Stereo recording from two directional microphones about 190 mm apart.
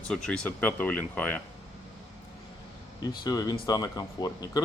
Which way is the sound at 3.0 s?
20° left (ahead or behind).